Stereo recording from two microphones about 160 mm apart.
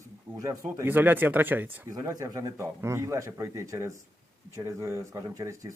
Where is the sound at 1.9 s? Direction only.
20° right (ahead or behind).